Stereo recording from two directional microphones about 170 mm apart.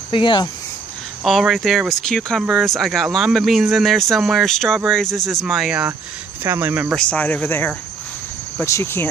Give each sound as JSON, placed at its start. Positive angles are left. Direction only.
{"t": 0.1, "sound": "speech", "side_deg": 30}
{"t": 1.2, "sound": "speech", "side_deg": 0}
{"t": 7.0, "sound": "speech", "side_deg": 10}